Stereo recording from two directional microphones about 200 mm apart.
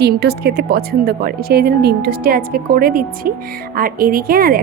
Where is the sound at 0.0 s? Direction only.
55° right (ahead or behind).